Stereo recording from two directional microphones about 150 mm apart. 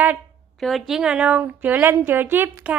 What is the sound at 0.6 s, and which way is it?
A woman's voice, centre (ahead or behind).